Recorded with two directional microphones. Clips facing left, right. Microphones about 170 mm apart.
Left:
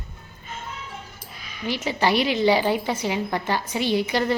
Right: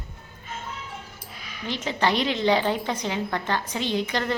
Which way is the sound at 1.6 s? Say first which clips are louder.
Left 2 dB; 10° left (ahead or behind).